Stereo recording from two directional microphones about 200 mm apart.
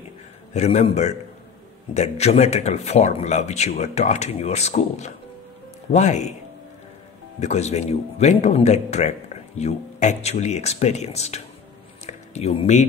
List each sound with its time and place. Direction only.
0.5 s a man's voice: 35° left (ahead or behind)
7.3 s a man's voice: 35° left (ahead or behind)